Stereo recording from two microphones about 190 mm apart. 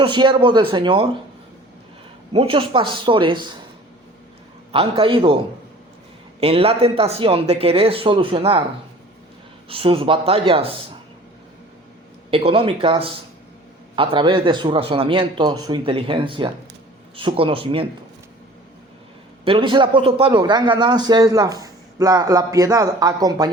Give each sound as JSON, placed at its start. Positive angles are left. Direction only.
{"t": 0.0, "sound": "a man's voice", "side_deg": -25}
{"t": 2.3, "sound": "a man's voice", "side_deg": -30}
{"t": 4.7, "sound": "a man's voice", "side_deg": -30}
{"t": 6.4, "sound": "a man's voice", "side_deg": -30}
{"t": 9.6, "sound": "a man's voice", "side_deg": -30}
{"t": 12.3, "sound": "a man's voice", "side_deg": -30}
{"t": 19.5, "sound": "a man's voice", "side_deg": -25}